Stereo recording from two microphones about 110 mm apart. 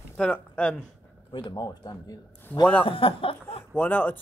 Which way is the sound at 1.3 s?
45° left (ahead or behind).